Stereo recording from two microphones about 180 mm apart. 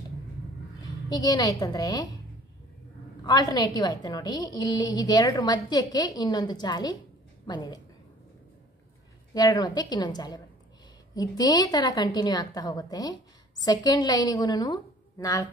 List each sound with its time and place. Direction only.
1.0 s a woman's voice: 20° left (ahead or behind)
3.3 s a woman's voice: 20° left (ahead or behind)
9.3 s a woman's voice: 20° left (ahead or behind)